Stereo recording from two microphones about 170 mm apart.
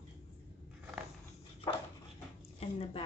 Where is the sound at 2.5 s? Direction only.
35° left (ahead or behind).